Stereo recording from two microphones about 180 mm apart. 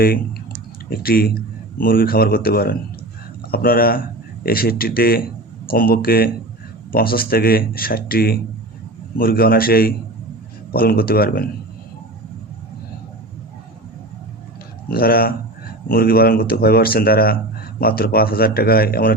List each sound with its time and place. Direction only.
0.9 s speech: 55° left (ahead or behind)
14.8 s speech: 55° left (ahead or behind)